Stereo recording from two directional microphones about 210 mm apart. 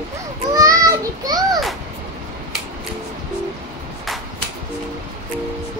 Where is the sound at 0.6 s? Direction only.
15° right (ahead or behind).